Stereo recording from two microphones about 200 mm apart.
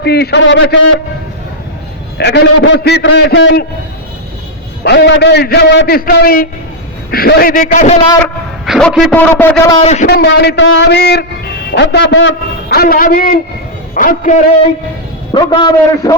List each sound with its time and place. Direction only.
0.0 s a man's voice: 55° left (ahead or behind)
2.1 s a man's voice: 60° left (ahead or behind)
4.8 s a man's voice: 55° left (ahead or behind); by 7.9 s 40° left (ahead or behind)
8.2 s a man's voice: centre (ahead or behind)
9.3 s a man's voice: 10° left (ahead or behind)
9.8 s a man's voice: 35° left (ahead or behind)
10.1 s a man's voice: 55° left (ahead or behind)
15.3 s a man's voice: 25° left (ahead or behind)